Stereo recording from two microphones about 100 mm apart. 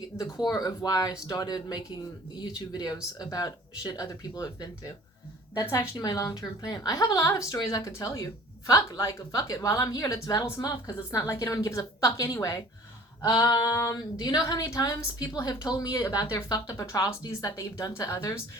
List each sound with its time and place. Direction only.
0.2 s a woman's voice: 40° left (ahead or behind)
5.7 s a woman's voice: 30° left (ahead or behind)